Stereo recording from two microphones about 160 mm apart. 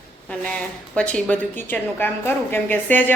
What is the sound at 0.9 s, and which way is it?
A woman's voice, 5° left (ahead or behind).